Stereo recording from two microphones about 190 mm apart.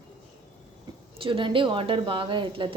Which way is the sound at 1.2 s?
25° right (ahead or behind).